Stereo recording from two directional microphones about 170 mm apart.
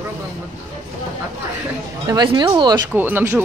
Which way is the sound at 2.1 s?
25° right (ahead or behind).